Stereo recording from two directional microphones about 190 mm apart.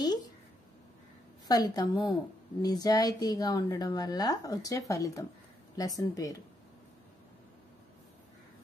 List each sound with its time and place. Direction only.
1.5 s a woman's voice: 20° left (ahead or behind)